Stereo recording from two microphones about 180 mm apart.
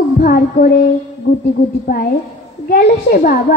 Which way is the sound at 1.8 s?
50° left (ahead or behind).